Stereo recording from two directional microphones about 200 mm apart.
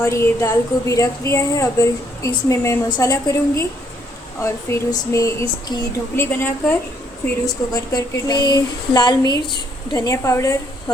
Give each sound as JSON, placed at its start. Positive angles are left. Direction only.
{"t": 0.0, "sound": "speech", "side_deg": 15}